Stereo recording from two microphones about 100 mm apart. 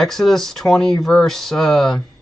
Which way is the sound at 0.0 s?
5° left (ahead or behind).